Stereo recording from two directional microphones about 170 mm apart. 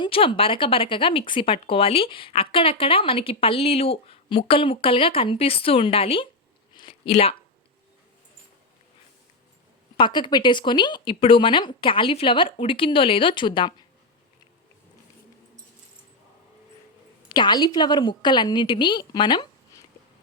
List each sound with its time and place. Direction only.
0.0 s speech: 30° left (ahead or behind)
6.7 s a sound: 30° left (ahead or behind)
10.0 s speech: 25° left (ahead or behind)
17.2 s speech: 25° left (ahead or behind)